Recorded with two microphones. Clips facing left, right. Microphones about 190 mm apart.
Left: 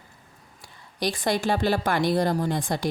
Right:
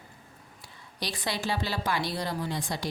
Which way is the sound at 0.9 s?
50° left (ahead or behind).